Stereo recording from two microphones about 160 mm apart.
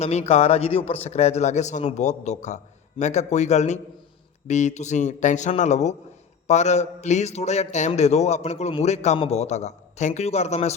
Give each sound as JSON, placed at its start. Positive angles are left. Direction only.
{"t": 0.0, "sound": "a man's voice", "side_deg": 45}